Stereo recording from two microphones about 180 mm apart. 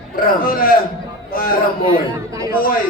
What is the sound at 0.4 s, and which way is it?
Speech, 55° left (ahead or behind).